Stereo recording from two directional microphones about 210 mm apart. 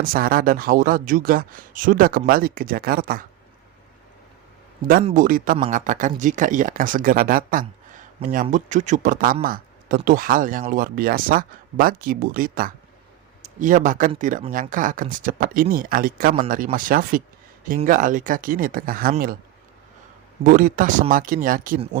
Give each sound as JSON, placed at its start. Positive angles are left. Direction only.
{"t": 0.0, "sound": "speech", "side_deg": -45}
{"t": 5.0, "sound": "speech", "side_deg": -40}
{"t": 20.4, "sound": "speech", "side_deg": -40}